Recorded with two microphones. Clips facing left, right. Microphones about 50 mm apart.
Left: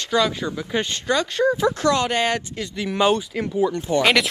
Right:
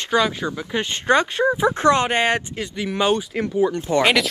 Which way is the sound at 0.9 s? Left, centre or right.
Right.